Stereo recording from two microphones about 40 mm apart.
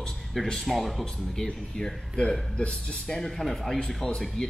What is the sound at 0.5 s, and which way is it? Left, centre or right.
Speech, centre.